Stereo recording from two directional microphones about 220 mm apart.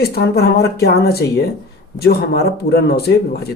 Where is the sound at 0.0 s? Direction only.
45° left (ahead or behind).